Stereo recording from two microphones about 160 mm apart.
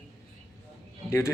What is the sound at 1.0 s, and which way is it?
Speech, 15° left (ahead or behind).